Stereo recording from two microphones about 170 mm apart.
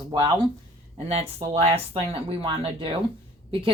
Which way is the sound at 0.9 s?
35° right (ahead or behind).